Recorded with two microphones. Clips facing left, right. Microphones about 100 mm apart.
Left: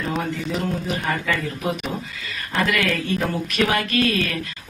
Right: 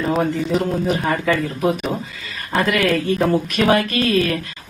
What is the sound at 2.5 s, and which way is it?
Speech, 35° right (ahead or behind).